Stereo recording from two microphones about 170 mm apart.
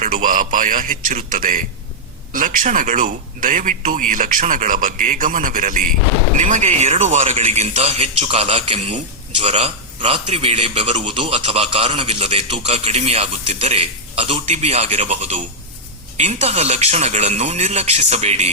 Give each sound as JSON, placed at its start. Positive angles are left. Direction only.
{"t": 0.0, "sound": "a man's voice", "side_deg": -50}